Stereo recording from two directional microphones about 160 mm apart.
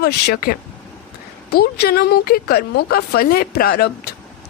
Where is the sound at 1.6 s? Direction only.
80° left.